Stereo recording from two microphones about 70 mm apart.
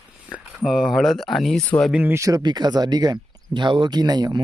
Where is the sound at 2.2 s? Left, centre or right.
Right.